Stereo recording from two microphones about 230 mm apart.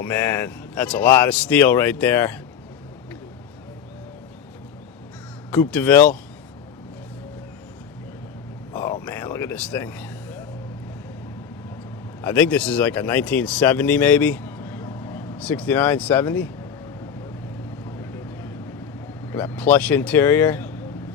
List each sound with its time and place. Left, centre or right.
0.0 s speech: centre
5.5 s speech: centre
8.7 s speech: centre
12.2 s speech: centre
18.0 s vehicle: centre
19.3 s speech: centre